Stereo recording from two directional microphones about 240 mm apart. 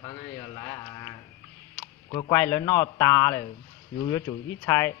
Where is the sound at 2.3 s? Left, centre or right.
Centre.